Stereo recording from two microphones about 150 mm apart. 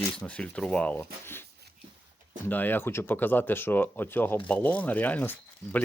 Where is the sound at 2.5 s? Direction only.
10° left (ahead or behind).